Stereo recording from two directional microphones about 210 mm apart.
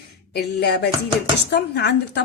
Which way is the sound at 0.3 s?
50° left (ahead or behind).